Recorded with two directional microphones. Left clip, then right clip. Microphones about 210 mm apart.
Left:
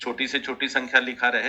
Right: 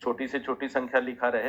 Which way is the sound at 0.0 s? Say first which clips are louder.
Left 3 dB; 40° left (ahead or behind).